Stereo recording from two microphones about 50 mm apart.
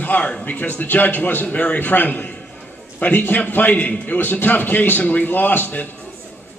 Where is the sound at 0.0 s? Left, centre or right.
Left.